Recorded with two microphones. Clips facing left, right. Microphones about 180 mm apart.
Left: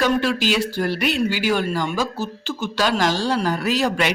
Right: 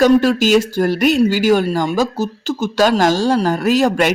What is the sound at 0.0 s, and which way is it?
Speech, 45° right (ahead or behind).